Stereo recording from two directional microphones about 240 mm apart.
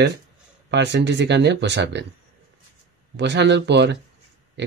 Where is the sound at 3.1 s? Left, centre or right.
Right.